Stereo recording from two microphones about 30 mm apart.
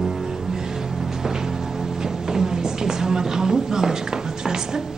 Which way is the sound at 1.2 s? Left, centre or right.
Centre.